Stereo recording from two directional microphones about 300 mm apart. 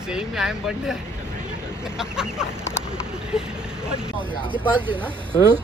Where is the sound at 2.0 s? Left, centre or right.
Centre.